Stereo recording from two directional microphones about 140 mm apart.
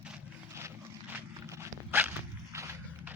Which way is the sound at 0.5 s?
15° right (ahead or behind).